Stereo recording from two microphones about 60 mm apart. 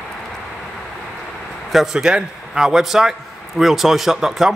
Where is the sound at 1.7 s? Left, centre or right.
Centre.